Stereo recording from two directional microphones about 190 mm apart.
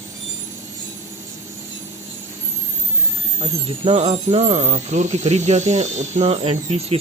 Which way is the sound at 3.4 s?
30° right (ahead or behind).